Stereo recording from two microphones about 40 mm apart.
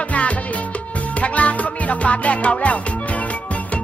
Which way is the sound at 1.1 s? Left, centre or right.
Left.